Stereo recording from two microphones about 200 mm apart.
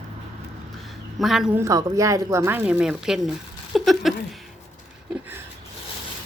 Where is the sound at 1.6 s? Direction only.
15° right (ahead or behind).